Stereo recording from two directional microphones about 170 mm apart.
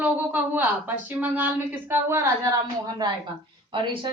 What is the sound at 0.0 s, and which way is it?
A woman's voice, 10° right (ahead or behind).